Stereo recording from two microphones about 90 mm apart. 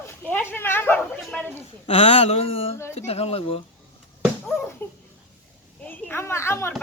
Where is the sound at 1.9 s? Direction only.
90° left.